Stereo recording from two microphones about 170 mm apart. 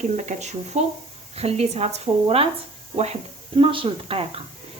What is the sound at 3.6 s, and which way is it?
Speech, 30° right (ahead or behind).